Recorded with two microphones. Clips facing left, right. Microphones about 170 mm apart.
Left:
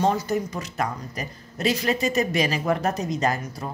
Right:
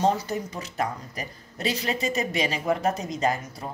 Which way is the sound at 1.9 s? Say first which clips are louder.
Left 4 dB; 25° right (ahead or behind).